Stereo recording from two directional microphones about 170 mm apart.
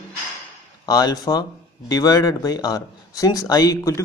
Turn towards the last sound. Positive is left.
turn(degrees=20)  # may be behind; listen again after turning